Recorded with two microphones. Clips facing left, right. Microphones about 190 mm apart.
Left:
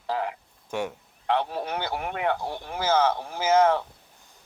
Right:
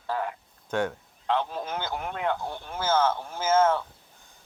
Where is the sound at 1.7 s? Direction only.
70° left (ahead or behind).